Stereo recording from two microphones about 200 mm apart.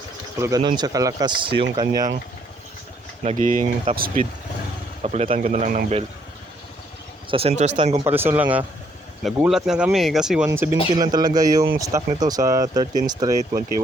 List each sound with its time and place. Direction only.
0.3 s speech: 15° right (ahead or behind)
3.2 s a man's voice: 40° right (ahead or behind)
5.0 s a man's voice: 35° right (ahead or behind)
7.3 s a man's voice: 30° right (ahead or behind)
7.9 s speech: 10° right (ahead or behind)
10.9 s speech: 20° right (ahead or behind)